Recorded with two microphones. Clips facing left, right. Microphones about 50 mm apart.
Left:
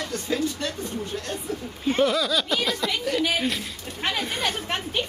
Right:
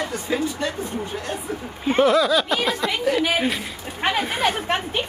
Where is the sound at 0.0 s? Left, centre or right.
Centre.